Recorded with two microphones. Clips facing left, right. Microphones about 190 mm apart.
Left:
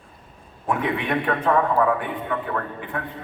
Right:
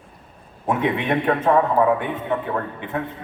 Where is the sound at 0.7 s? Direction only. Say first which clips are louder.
Right 3 dB; 25° right (ahead or behind).